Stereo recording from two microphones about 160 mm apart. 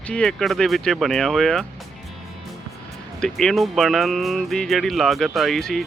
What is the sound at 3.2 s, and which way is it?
Speech, centre (ahead or behind).